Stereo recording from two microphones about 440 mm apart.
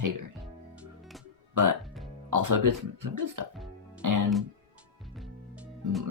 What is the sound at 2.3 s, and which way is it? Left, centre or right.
Speech, right.